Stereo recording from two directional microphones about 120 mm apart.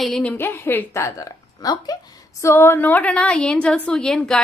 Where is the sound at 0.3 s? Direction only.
20° left (ahead or behind).